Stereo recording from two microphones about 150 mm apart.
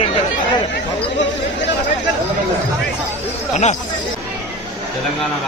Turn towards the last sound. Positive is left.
turn(degrees=50)  # may be behind; listen again after turning